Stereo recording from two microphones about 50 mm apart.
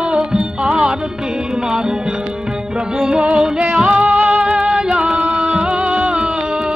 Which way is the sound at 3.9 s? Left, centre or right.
Right.